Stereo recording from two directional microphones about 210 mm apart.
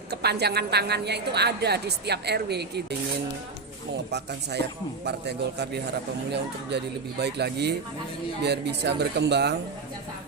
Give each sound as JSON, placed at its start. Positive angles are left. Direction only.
{"t": 0.1, "sound": "a woman's voice", "side_deg": -50}
{"t": 3.9, "sound": "a woman's voice", "side_deg": -50}